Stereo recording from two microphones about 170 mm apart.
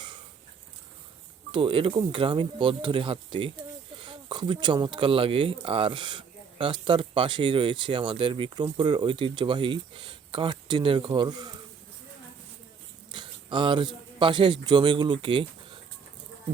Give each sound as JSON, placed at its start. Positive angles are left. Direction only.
{"t": 1.5, "sound": "speech", "side_deg": -30}
{"t": 13.1, "sound": "a sound", "side_deg": -30}
{"t": 14.7, "sound": "speech", "side_deg": -25}